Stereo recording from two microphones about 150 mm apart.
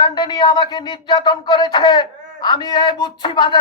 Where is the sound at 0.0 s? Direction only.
30° left (ahead or behind).